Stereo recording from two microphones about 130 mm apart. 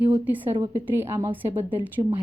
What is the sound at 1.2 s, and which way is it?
Speech, 50° right (ahead or behind).